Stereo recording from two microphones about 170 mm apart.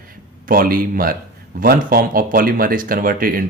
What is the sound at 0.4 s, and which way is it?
Speech, 55° right (ahead or behind).